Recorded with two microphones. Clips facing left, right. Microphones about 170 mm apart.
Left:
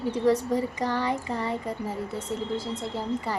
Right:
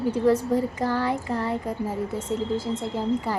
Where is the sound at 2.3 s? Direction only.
15° right (ahead or behind).